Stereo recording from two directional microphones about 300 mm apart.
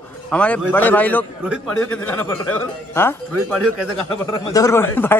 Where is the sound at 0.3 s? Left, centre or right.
Centre.